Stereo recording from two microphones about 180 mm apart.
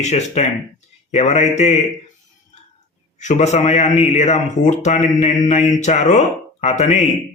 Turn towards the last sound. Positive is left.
turn(degrees=40)  # may be behind; listen again after turning